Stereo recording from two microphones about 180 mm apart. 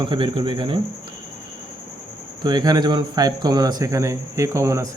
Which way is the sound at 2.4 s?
20° right (ahead or behind).